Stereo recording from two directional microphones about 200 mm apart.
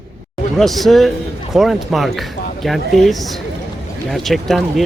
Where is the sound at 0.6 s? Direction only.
Centre (ahead or behind).